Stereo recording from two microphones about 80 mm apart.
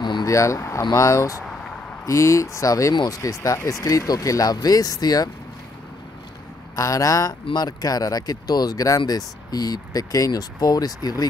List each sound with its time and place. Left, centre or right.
0.2 s speech: left
6.7 s speech: left